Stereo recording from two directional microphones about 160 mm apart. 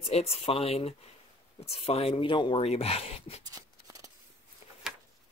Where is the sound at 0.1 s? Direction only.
40° left (ahead or behind).